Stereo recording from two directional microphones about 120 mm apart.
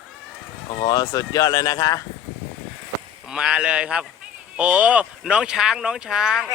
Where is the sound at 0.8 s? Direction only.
30° left (ahead or behind).